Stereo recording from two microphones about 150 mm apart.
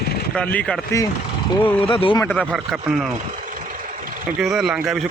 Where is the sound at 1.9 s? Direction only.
35° left (ahead or behind).